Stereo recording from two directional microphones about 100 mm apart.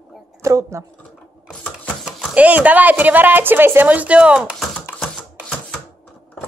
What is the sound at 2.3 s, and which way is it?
A woman's voice, 15° right (ahead or behind).